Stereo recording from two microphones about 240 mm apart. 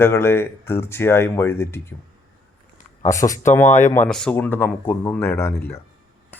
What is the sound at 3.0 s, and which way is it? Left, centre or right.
Speech, centre.